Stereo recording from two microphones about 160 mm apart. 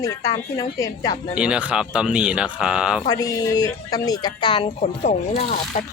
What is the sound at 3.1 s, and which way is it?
A woman's voice, 25° left (ahead or behind).